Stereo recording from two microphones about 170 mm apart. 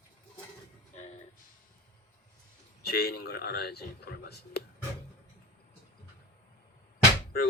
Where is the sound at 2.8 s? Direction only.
70° left (ahead or behind).